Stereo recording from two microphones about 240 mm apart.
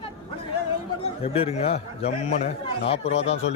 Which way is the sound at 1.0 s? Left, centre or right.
Left.